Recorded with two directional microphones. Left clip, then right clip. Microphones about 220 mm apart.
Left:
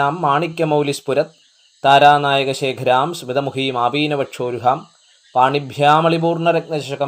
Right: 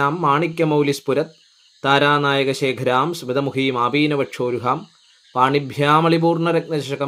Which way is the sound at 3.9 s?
45° right (ahead or behind).